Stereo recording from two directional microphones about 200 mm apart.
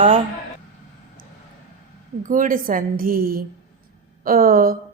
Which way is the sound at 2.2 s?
40° right (ahead or behind).